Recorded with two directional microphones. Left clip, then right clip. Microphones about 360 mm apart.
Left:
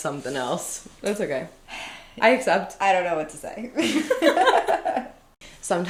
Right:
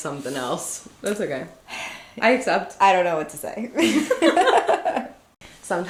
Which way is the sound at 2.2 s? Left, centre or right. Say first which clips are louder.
Even; left.